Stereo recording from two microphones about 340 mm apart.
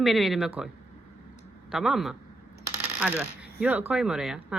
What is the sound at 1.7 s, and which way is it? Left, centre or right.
Speech, centre.